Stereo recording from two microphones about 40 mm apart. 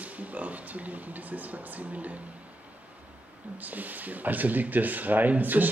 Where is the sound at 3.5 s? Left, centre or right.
Right.